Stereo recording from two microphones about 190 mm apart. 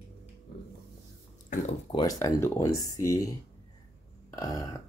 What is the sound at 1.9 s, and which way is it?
Speech, 20° left (ahead or behind).